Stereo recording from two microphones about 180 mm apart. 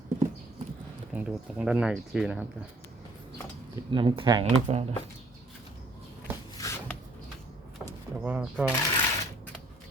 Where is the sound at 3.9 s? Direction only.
30° right (ahead or behind).